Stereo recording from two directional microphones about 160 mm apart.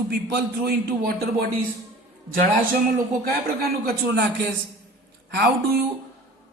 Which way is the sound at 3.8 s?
70° right (ahead or behind).